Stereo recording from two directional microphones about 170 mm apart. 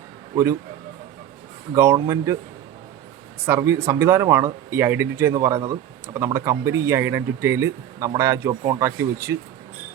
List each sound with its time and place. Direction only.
1.7 s speech: 15° right (ahead or behind)
3.4 s speech: 15° right (ahead or behind)